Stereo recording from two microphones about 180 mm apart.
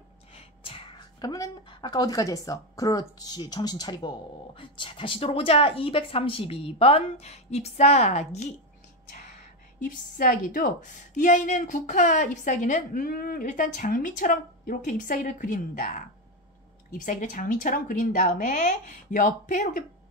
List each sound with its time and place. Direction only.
0.4 s a woman's voice: 30° left (ahead or behind)
9.8 s a woman's voice: 50° left (ahead or behind)